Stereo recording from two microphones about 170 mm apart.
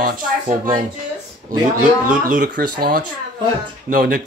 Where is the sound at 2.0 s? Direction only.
50° right (ahead or behind).